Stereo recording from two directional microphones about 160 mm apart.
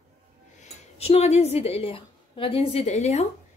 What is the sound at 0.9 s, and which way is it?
A woman's voice, 40° left (ahead or behind).